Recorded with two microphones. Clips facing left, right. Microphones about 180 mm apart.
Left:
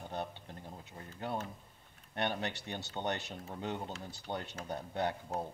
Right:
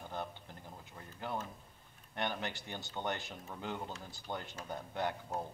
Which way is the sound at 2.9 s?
30° left (ahead or behind).